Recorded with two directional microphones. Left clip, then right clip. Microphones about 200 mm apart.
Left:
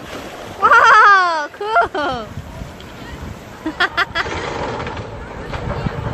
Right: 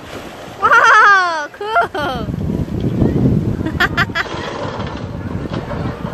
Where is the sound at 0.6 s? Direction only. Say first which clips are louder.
Even; centre (ahead or behind).